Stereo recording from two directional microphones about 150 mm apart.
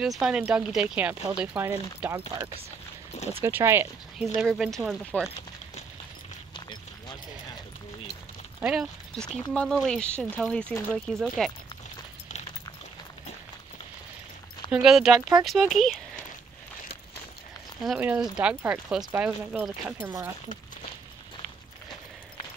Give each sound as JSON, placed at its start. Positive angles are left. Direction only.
{"t": 0.2, "sound": "speech", "side_deg": -5}
{"t": 4.4, "sound": "speech", "side_deg": 0}
{"t": 6.5, "sound": "run", "side_deg": 30}
{"t": 8.5, "sound": "speech", "side_deg": -10}
{"t": 9.1, "sound": "speech", "side_deg": 5}
{"t": 14.7, "sound": "speech", "side_deg": -5}
{"t": 17.8, "sound": "speech", "side_deg": -5}